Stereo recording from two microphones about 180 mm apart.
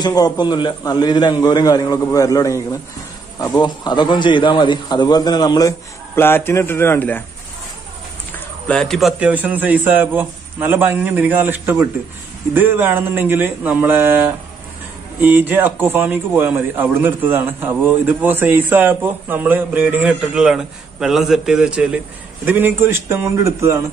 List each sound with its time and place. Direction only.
0.0 s a man's voice: 20° left (ahead or behind)
8.6 s speech: 5° left (ahead or behind)
15.1 s speech: 10° right (ahead or behind)